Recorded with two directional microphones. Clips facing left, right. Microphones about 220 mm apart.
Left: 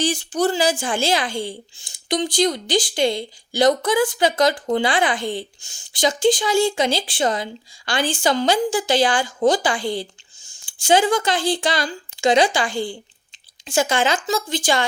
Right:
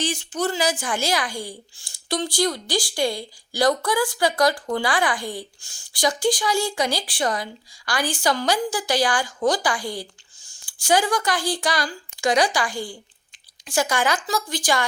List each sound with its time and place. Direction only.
0.0 s a child's voice: 35° left (ahead or behind)